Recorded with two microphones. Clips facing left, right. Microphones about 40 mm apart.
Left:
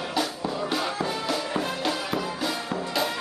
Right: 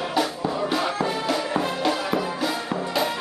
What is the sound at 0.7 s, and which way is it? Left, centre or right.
Music, centre.